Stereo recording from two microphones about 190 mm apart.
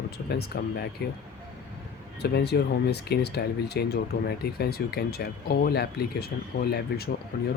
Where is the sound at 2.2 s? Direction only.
60° left (ahead or behind).